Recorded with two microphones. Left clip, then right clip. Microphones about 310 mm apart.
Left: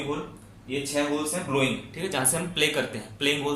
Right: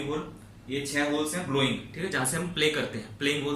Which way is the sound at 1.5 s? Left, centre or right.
Centre.